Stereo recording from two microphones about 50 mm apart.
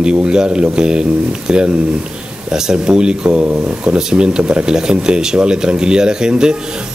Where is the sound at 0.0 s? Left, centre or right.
Centre.